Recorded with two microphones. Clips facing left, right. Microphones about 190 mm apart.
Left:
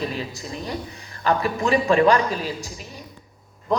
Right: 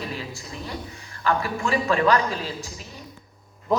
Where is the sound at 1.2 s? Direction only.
20° left (ahead or behind).